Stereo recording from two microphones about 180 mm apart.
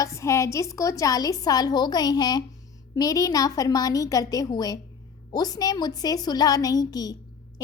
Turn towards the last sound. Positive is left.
turn(degrees=20)  # may be behind; listen again after turning